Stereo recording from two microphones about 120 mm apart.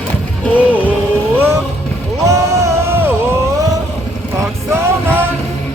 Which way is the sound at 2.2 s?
25° right (ahead or behind).